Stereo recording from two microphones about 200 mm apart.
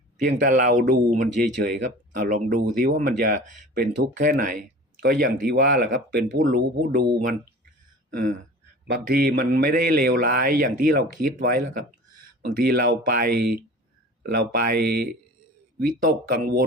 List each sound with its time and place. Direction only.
0.3 s speech: 45° right (ahead or behind)
8.9 s speech: 50° right (ahead or behind)